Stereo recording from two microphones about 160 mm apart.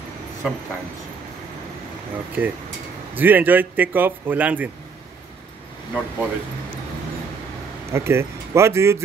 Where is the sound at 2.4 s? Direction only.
10° right (ahead or behind).